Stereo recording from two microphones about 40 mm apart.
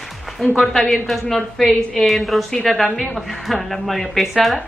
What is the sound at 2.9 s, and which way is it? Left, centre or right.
Speech, centre.